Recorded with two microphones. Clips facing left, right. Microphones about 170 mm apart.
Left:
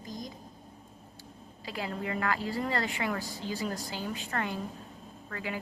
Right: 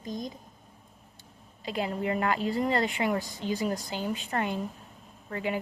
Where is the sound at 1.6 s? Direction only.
20° right (ahead or behind).